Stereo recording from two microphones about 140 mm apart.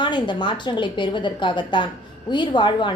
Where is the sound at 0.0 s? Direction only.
35° left (ahead or behind).